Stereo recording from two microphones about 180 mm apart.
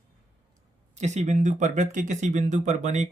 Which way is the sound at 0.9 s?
40° right (ahead or behind).